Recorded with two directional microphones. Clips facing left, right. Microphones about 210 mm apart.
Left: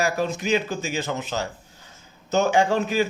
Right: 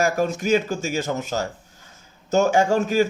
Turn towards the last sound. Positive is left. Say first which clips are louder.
# right 2 dB
turn(degrees=-45)  # may be behind; listen again after turning